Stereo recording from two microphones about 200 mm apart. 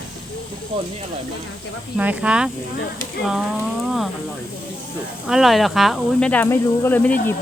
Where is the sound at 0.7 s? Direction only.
30° right (ahead or behind).